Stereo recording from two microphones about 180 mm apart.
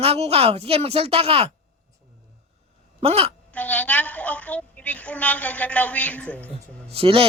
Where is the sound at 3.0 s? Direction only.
35° right (ahead or behind).